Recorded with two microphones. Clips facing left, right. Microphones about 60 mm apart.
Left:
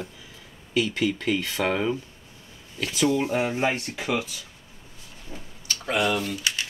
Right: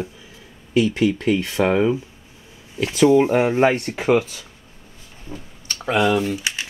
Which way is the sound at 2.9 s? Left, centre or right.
Right.